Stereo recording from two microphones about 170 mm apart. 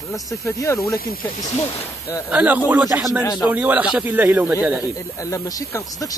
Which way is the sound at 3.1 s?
20° left (ahead or behind).